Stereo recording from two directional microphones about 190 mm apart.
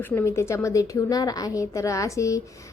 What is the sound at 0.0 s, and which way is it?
A woman's voice, 10° left (ahead or behind).